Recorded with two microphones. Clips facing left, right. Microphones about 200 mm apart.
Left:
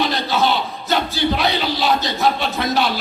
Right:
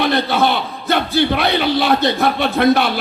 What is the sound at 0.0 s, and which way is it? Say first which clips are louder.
A man's voice: right 3 dB; 60° right (ahead or behind).